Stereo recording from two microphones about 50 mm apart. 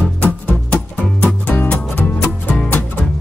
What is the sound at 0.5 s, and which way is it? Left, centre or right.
Music, left.